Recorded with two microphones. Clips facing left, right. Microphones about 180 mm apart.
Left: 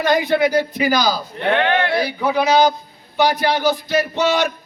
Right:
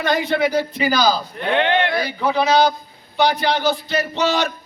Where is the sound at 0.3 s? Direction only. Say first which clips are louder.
Left 2 dB; 10° left (ahead or behind).